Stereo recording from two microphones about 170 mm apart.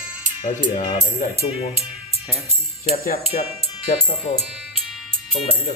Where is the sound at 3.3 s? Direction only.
40° left (ahead or behind).